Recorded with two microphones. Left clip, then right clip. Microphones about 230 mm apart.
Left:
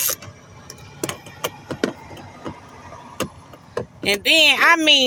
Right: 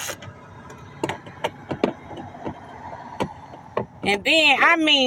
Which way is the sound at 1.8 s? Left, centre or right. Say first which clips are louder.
Right 1 dB; left.